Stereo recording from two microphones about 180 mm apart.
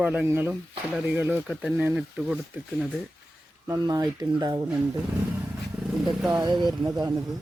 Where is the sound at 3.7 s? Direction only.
20° right (ahead or behind).